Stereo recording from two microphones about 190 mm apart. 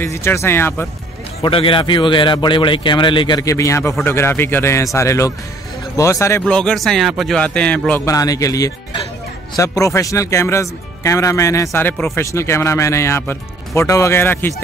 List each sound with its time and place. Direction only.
0.0 s speech: 15° left (ahead or behind)
1.4 s a man's voice: 25° left (ahead or behind)
6.4 s a man's voice: 5° left (ahead or behind)